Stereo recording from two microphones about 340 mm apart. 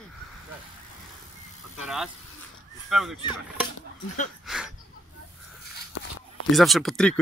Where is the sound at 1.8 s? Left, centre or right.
Centre.